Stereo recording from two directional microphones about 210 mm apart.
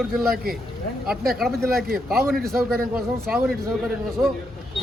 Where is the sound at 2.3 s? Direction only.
Centre (ahead or behind).